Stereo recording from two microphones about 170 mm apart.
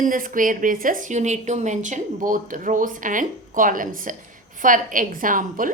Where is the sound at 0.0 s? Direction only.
55° right (ahead or behind).